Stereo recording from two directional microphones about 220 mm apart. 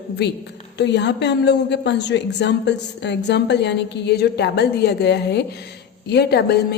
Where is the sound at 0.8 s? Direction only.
50° left (ahead or behind).